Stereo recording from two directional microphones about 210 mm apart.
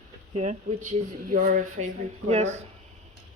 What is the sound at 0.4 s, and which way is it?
Speech, 35° right (ahead or behind).